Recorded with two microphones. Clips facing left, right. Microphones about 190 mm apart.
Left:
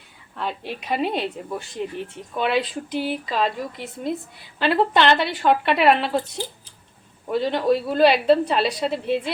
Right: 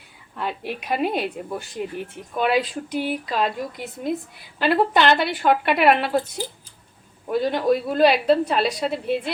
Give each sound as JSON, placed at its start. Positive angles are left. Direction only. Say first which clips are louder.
{"t": 0.3, "sound": "a woman's voice", "louder": "right 1 dB", "side_deg": -5}
{"t": 4.6, "sound": "a woman's voice", "louder": "even", "side_deg": -5}
{"t": 7.3, "sound": "a woman's voice", "louder": "even", "side_deg": 0}